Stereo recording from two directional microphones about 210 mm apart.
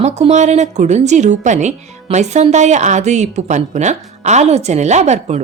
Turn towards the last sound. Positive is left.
turn(degrees=-30)  # may be behind; listen again after turning